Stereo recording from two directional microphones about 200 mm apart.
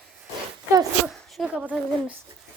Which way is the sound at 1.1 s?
Centre (ahead or behind).